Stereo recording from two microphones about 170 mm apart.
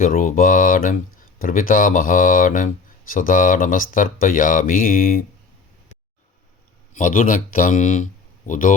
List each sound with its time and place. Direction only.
0.0 s speech: 55° left (ahead or behind)
6.9 s speech: 50° left (ahead or behind)